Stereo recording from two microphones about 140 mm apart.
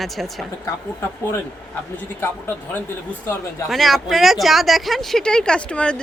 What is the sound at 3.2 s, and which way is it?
Speech, 20° left (ahead or behind).